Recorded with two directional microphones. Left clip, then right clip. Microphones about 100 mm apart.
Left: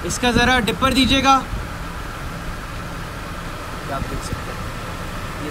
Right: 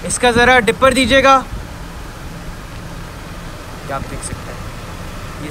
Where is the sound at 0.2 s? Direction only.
35° left (ahead or behind).